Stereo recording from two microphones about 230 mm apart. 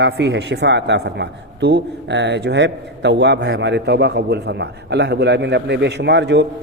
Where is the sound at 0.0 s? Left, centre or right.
Right.